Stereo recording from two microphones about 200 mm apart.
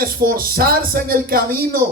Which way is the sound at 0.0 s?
45° right (ahead or behind).